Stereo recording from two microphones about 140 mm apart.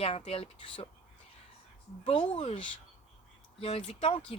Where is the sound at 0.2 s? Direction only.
45° left (ahead or behind).